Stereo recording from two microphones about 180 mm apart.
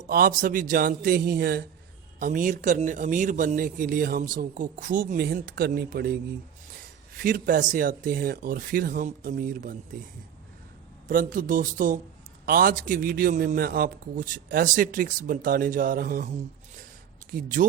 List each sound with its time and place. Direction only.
0.1 s speech: 50° right (ahead or behind)
2.1 s speech: 45° right (ahead or behind)
7.2 s speech: 50° right (ahead or behind)
11.1 s speech: 50° right (ahead or behind)
17.3 s speech: 50° right (ahead or behind)